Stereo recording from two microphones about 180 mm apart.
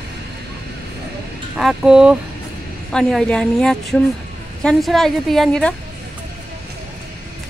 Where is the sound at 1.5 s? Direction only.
5° right (ahead or behind).